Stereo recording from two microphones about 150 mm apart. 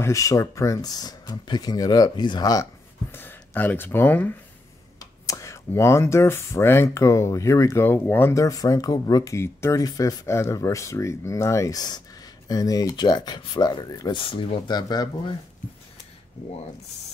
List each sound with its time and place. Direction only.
0.0 s speech: 20° left (ahead or behind)
4.9 s speech: 25° left (ahead or behind)